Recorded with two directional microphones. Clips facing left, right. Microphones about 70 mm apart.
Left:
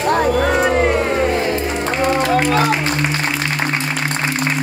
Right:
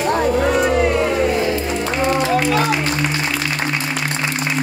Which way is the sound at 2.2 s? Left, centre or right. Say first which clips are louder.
Left 2 dB; left.